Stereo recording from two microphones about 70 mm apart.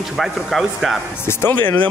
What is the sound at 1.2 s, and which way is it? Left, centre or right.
Speech, left.